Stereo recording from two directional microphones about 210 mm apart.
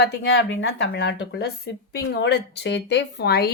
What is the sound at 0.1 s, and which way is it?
Speech, 55° left (ahead or behind).